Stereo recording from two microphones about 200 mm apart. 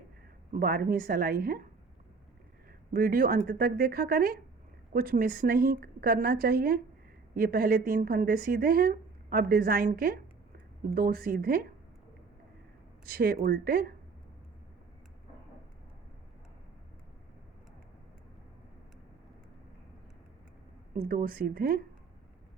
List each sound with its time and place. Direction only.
0.5 s a woman's voice: 45° right (ahead or behind)
2.9 s a woman's voice: 45° right (ahead or behind)
13.1 s a woman's voice: 50° right (ahead or behind)
20.9 s a woman's voice: 45° right (ahead or behind)